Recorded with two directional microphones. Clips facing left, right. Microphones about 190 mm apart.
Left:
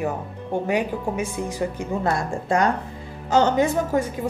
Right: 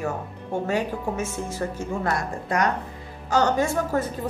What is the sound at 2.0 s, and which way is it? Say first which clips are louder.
A woman's voice: left 5 dB; 25° left (ahead or behind).